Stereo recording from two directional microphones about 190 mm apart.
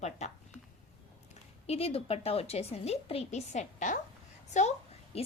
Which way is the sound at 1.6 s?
30° left (ahead or behind).